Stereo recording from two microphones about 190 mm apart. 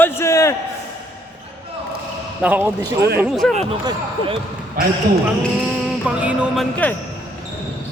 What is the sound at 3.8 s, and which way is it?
Speech, 30° right (ahead or behind).